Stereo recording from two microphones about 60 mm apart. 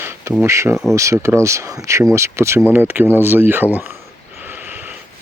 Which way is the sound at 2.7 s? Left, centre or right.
Right.